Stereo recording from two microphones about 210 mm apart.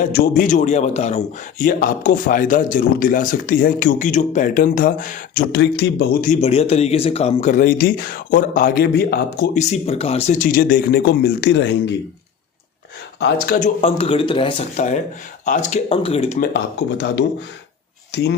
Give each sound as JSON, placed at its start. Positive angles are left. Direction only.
{"t": 0.0, "sound": "a man's voice", "side_deg": 40}
{"t": 6.2, "sound": "a man's voice", "side_deg": 30}
{"t": 9.6, "sound": "speech", "side_deg": 30}
{"t": 13.1, "sound": "speech", "side_deg": 55}
{"t": 13.6, "sound": "a man's voice", "side_deg": 30}
{"t": 18.1, "sound": "speech", "side_deg": 55}